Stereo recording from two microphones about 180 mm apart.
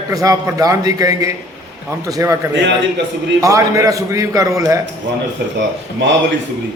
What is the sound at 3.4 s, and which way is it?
A man's voice, 20° right (ahead or behind).